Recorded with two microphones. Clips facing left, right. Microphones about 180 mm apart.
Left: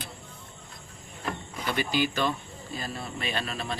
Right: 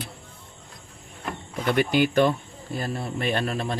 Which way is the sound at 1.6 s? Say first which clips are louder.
Right 6 dB; 60° right (ahead or behind).